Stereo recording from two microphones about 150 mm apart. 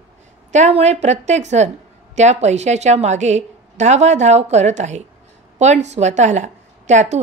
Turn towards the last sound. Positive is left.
turn(degrees=-50)  # may be behind; listen again after turning